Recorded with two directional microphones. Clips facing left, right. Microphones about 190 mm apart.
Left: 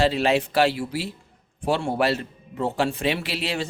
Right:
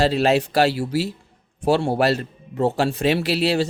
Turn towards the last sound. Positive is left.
turn(degrees=-40)  # may be behind; listen again after turning